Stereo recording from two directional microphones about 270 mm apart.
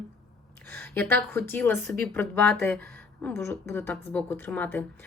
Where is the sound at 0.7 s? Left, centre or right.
Centre.